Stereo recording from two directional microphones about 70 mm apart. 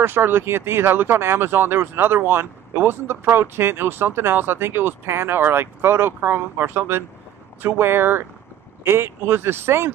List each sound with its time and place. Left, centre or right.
0.0 s speech: right